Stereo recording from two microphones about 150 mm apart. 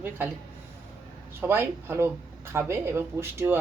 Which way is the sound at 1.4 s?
15° right (ahead or behind).